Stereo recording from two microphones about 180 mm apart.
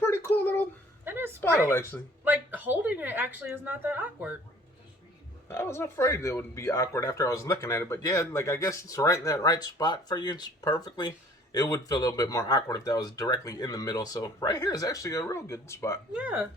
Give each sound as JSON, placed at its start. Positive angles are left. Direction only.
{"t": 0.0, "sound": "a sound", "side_deg": 15}
{"t": 1.0, "sound": "a sound", "side_deg": -10}
{"t": 1.7, "sound": "speech", "side_deg": 15}
{"t": 2.2, "sound": "a woman's voice", "side_deg": -10}
{"t": 5.5, "sound": "speech", "side_deg": 15}
{"t": 16.1, "sound": "a woman's voice", "side_deg": -5}